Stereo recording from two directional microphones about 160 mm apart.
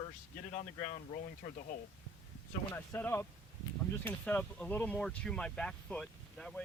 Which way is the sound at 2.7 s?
15° left (ahead or behind).